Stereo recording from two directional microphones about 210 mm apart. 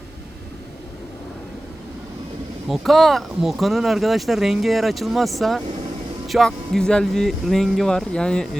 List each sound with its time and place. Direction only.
2.6 s speech: centre (ahead or behind)